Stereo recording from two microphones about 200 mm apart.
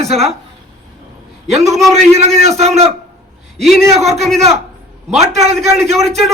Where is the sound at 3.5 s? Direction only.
Centre (ahead or behind).